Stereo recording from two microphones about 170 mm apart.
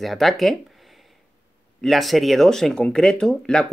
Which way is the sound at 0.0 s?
Centre (ahead or behind).